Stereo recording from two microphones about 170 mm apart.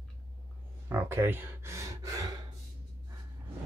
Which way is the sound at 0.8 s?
15° right (ahead or behind).